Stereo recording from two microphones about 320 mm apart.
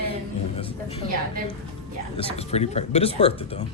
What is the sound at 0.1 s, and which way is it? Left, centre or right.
Music, centre.